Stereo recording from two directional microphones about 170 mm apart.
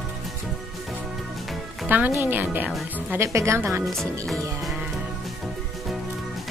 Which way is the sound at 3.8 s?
Centre (ahead or behind).